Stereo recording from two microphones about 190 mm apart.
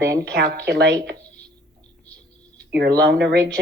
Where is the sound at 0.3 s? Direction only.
60° right (ahead or behind).